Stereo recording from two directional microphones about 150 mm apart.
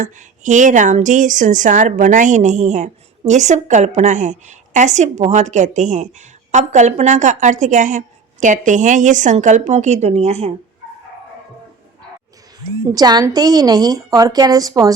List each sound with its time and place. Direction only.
0.0 s a woman's voice: 55° right (ahead or behind)
12.9 s a woman's voice: 25° right (ahead or behind)